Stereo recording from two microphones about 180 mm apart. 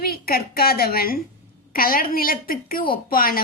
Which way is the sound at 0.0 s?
55° left (ahead or behind).